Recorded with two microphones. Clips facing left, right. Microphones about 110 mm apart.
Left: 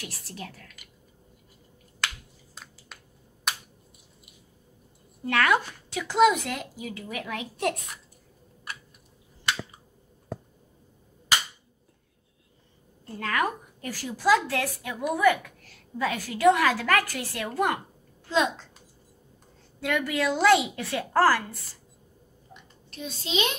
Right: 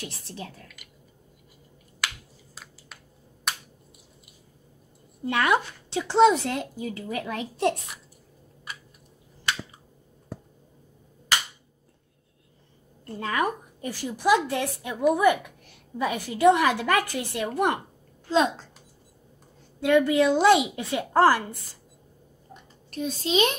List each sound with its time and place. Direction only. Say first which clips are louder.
0.0 s a woman's voice: right 2 dB; 25° right (ahead or behind)
2.5 s finger snapping: even; 5° right (ahead or behind)
5.2 s speech: even; 20° right (ahead or behind)
13.2 s a woman's voice: right 1 dB; 20° right (ahead or behind)
18.3 s speech: right 3 dB; 35° right (ahead or behind)
19.8 s a woman's voice: right 7 dB; 20° right (ahead or behind)
22.5 s a sound: right 5 dB; 45° right (ahead or behind)